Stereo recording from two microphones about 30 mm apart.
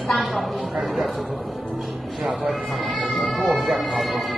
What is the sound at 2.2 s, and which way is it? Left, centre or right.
Speech, centre.